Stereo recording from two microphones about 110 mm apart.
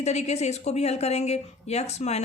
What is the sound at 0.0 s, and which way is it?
Speech, 80° left.